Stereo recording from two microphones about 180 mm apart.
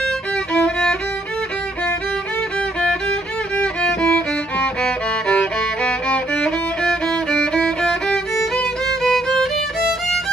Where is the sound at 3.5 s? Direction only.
5° left (ahead or behind).